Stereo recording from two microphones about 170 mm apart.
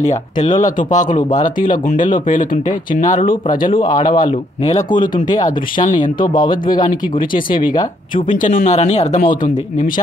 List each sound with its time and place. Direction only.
0.0 s speech: 45° left (ahead or behind)